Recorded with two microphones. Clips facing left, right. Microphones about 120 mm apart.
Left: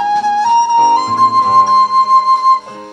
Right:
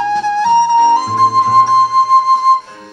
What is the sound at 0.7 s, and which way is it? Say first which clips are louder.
Flute: left 1 dB; 55° left (ahead or behind).